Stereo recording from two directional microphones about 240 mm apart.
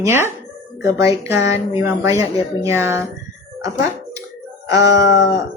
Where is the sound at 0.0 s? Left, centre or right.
Centre.